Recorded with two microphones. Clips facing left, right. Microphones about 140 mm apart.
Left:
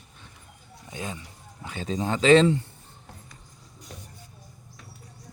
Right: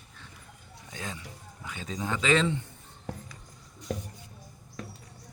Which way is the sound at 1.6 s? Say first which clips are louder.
Left 6 dB; 30° left (ahead or behind).